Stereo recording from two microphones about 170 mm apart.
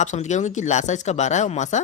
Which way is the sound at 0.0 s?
45° left (ahead or behind).